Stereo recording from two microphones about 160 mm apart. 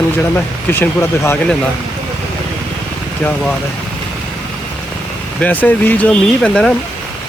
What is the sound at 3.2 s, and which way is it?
Speech, 5° left (ahead or behind).